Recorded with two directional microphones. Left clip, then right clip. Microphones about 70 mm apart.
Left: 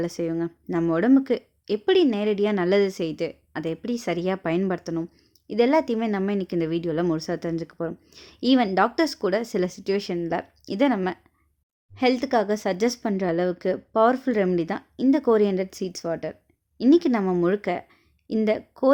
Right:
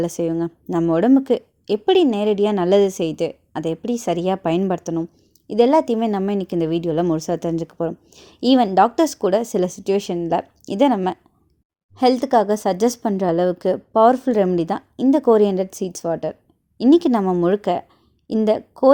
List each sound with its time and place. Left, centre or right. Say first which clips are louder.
0.0 s a woman's voice: right 5 dB; right
7.2 s speech: right 6 dB; right
7.9 s a woman's voice: right 6 dB; right
17.2 s a woman's voice: right 5 dB; right
17.6 s speech: right 6 dB; right